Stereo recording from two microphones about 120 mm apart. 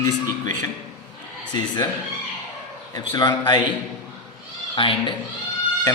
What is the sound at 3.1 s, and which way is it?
Speech, 35° left (ahead or behind).